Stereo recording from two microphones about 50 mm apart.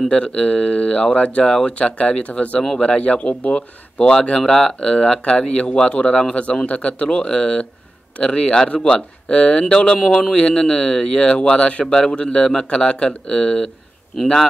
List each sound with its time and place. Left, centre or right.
0.1 s a man's voice: left